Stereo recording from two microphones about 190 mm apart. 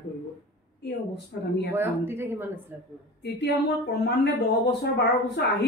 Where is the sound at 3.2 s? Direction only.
65° left (ahead or behind).